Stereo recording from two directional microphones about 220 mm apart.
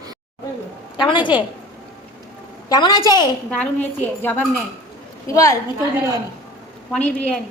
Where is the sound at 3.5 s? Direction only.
5° left (ahead or behind).